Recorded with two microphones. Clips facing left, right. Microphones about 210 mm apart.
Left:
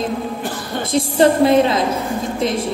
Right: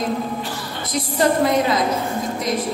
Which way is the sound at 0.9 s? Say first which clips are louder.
Left 5 dB; 30° left (ahead or behind).